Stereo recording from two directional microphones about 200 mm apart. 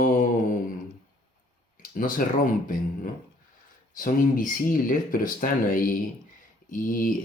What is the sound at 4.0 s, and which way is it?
Speech, 40° left (ahead or behind).